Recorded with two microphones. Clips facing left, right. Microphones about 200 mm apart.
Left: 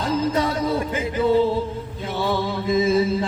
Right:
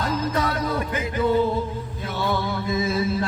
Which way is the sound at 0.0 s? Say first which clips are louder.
Left 3 dB; 25° left (ahead or behind).